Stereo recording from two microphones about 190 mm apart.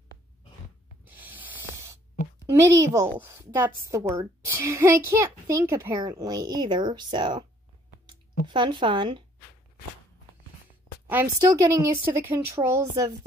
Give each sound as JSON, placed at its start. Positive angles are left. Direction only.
{"t": 1.0, "sound": "a sound", "side_deg": -10}
{"t": 2.5, "sound": "a woman's voice", "side_deg": -15}
{"t": 8.5, "sound": "speech", "side_deg": -25}
{"t": 11.1, "sound": "a woman's voice", "side_deg": -10}